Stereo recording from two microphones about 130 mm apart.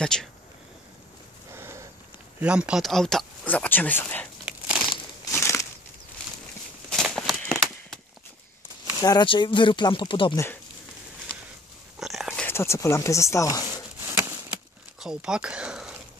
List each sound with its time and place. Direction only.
0.0 s speech: 5° left (ahead or behind)
1.5 s a sound: 20° right (ahead or behind)
2.4 s speech: 10° right (ahead or behind); by 4.3 s 10° left (ahead or behind)
4.5 s crushing: 10° right (ahead or behind)
5.3 s crumpling: 20° left (ahead or behind)
6.9 s a sound: 5° left (ahead or behind)
9.0 s speech: 35° left (ahead or behind)
10.3 s speech: 20° left (ahead or behind)
12.0 s a sound: centre (ahead or behind)
12.4 s speech: 20° left (ahead or behind)
14.0 s a sound: 15° right (ahead or behind)
15.0 s speech: 5° right (ahead or behind)